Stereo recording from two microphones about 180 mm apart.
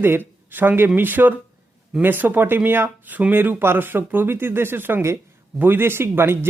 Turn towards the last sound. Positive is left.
turn(degrees=-15)  # may be behind; listen again after turning